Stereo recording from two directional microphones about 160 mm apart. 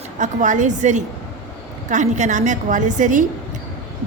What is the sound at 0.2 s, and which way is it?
A woman's voice, 50° right (ahead or behind).